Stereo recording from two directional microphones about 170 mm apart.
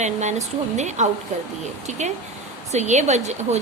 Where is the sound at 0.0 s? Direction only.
45° right (ahead or behind).